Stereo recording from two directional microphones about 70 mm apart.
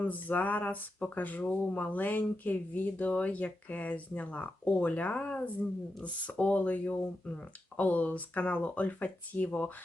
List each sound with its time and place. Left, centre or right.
0.0 s speech: left